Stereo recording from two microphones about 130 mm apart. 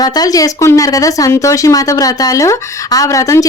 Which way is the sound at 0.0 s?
30° left (ahead or behind).